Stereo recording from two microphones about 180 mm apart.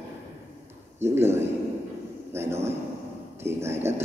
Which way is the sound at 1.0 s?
15° right (ahead or behind).